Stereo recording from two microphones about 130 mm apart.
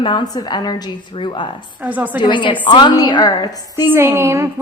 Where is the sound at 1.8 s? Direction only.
10° right (ahead or behind).